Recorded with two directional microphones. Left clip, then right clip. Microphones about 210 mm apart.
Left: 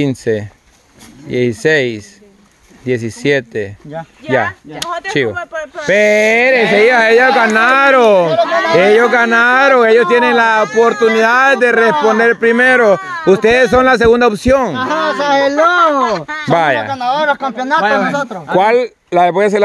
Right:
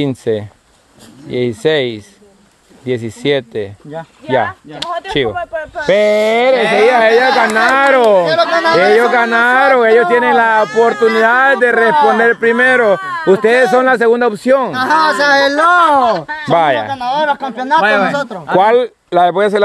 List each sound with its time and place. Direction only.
0.0 s speech: 5° left (ahead or behind)
4.7 s speech: 20° right (ahead or behind)
5.4 s speech: 50° left (ahead or behind)
5.9 s speech: 10° left (ahead or behind)
6.8 s speech: 30° left (ahead or behind)
14.8 s speech: 60° right (ahead or behind)
16.5 s speech: 5° left (ahead or behind)
17.8 s speech: 35° right (ahead or behind)
18.1 s speech: 10° right (ahead or behind)
18.6 s speech: centre (ahead or behind)